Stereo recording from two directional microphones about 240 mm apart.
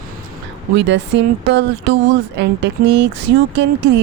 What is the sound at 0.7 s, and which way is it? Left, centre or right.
Speech, right.